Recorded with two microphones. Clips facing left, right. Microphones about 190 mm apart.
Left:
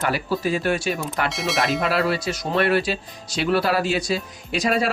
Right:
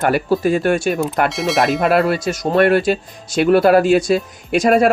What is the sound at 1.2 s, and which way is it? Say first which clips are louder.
Speech: right 4 dB; centre (ahead or behind).